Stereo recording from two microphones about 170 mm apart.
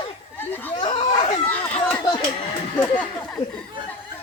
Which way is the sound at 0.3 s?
10° left (ahead or behind).